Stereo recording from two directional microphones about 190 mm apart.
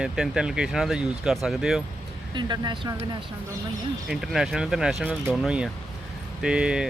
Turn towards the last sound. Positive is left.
turn(degrees=-5)  # may be behind; listen again after turning